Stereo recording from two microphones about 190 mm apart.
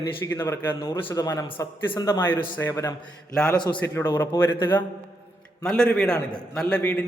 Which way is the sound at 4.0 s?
10° left (ahead or behind).